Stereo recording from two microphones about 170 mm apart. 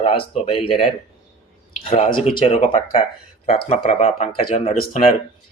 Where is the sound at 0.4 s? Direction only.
35° left (ahead or behind).